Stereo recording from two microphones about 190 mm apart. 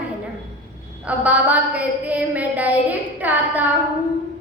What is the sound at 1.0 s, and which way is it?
A woman's voice, 5° right (ahead or behind).